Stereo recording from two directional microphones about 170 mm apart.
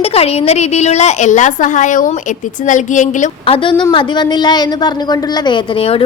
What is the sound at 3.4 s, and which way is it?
A woman's voice, 30° left (ahead or behind).